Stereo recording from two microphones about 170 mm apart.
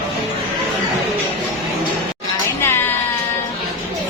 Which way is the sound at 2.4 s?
15° left (ahead or behind).